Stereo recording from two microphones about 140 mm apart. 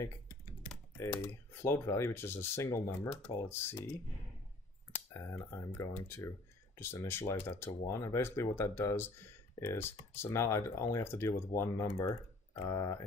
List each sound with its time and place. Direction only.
0.9 s speech: 20° left (ahead or behind)
4.9 s a sound: 20° left (ahead or behind)
5.5 s speech: 20° left (ahead or behind)